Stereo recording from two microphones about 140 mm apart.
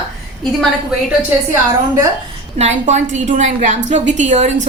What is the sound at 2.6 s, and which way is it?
A woman's voice, 55° right (ahead or behind).